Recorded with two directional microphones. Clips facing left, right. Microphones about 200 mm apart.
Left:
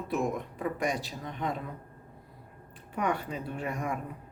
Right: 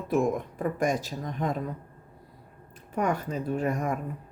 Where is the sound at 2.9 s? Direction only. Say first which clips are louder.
Right 3 dB; 45° right (ahead or behind).